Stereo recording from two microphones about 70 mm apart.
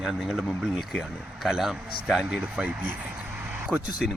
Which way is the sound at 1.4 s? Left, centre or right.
Centre.